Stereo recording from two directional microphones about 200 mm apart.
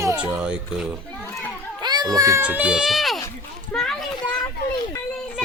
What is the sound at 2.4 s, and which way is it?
A child's voice, 5° right (ahead or behind).